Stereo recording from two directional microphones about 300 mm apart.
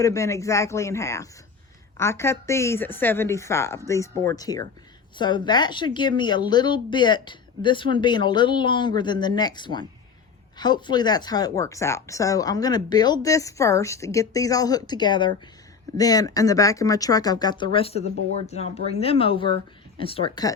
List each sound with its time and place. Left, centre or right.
0.0 s speech: centre